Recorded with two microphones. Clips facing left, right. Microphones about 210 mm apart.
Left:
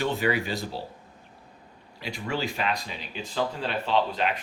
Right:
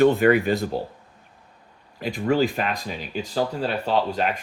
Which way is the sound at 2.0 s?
50° right (ahead or behind).